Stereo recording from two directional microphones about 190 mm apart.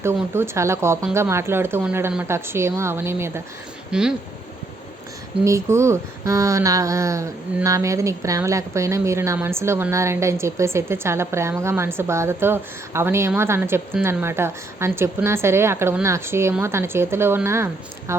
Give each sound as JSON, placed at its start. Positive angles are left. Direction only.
{"t": 0.0, "sound": "speech", "side_deg": -15}
{"t": 5.5, "sound": "speech", "side_deg": -15}